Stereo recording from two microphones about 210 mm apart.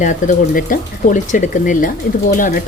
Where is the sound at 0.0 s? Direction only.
35° left (ahead or behind).